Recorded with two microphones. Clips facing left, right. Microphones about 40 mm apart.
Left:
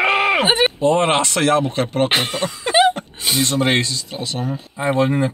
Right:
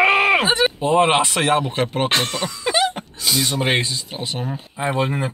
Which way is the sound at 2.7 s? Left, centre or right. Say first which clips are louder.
Left 6 dB; left.